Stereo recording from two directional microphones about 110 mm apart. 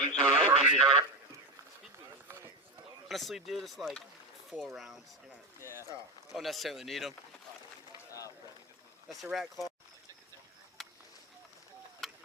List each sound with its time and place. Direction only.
0.1 s speech: 5° left (ahead or behind)
0.6 s speech: 5° right (ahead or behind)
3.1 s speech: centre (ahead or behind)
6.3 s speech: centre (ahead or behind)
9.0 s speech: centre (ahead or behind)
10.8 s a sound: centre (ahead or behind)